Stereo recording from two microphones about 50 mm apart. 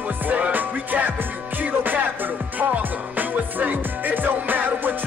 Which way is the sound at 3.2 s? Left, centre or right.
Right.